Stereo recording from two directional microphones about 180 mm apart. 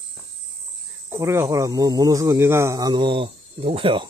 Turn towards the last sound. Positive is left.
turn(degrees=-30)  # may be behind; listen again after turning